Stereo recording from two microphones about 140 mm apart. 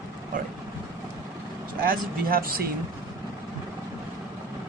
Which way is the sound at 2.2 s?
90° right.